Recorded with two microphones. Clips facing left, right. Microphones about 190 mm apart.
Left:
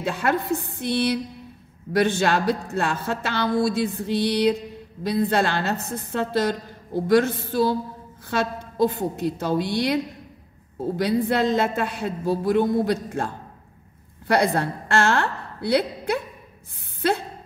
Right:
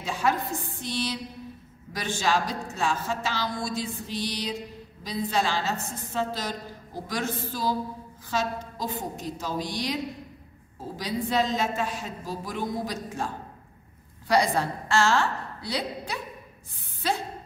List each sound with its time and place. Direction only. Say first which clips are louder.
0.0 s a woman's voice: left 3 dB; 60° left (ahead or behind)
11.0 s a woman's voice: left 5 dB; 60° left (ahead or behind)